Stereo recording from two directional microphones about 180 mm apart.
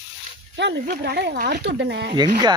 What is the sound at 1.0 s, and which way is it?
Speech, 65° right (ahead or behind).